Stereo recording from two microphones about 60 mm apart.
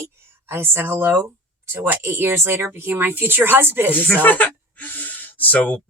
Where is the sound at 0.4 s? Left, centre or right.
Right.